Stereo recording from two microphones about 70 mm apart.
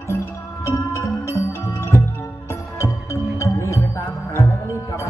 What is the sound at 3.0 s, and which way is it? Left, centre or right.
Music, left.